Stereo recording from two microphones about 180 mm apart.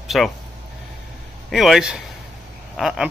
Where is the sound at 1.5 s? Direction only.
Centre (ahead or behind).